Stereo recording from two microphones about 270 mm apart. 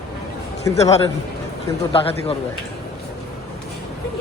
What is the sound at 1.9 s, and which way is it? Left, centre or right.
Speech, left.